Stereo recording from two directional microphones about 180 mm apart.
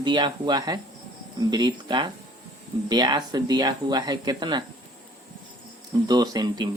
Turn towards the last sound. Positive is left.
turn(degrees=-20)  # may be behind; listen again after turning